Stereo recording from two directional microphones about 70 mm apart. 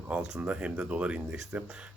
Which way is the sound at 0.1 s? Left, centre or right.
Centre.